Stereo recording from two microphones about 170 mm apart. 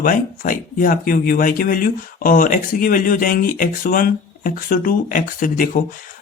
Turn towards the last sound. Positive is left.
turn(degrees=55)  # may be behind; listen again after turning